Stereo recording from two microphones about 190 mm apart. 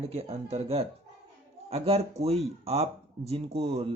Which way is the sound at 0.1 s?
30° right (ahead or behind).